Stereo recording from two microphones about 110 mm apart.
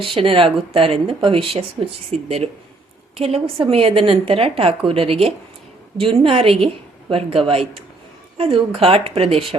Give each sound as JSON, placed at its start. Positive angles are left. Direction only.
{"t": 0.0, "sound": "a woman's voice", "side_deg": -55}